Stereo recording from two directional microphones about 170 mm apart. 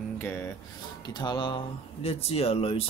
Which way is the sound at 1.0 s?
25° left (ahead or behind).